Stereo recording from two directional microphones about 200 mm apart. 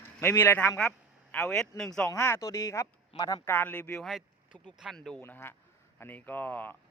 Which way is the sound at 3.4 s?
10° left (ahead or behind).